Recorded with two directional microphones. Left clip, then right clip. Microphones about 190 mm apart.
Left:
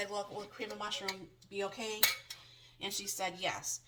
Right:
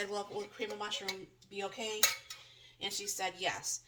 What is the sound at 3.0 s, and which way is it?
Speech, 25° right (ahead or behind).